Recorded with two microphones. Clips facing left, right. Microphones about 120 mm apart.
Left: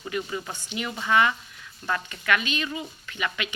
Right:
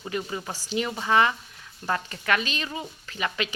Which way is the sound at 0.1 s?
25° right (ahead or behind).